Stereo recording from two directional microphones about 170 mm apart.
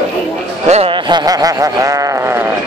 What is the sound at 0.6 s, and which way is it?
Speech, 35° right (ahead or behind).